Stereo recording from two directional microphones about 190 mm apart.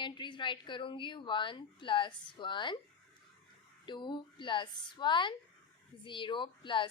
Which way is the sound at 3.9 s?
25° left (ahead or behind).